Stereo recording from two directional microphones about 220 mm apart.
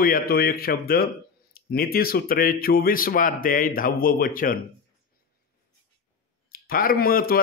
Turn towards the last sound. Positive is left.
turn(degrees=40)  # may be behind; listen again after turning